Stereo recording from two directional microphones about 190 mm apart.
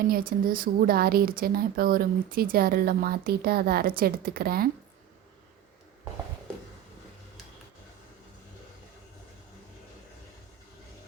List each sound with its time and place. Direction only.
0.1 s speech: 50° right (ahead or behind)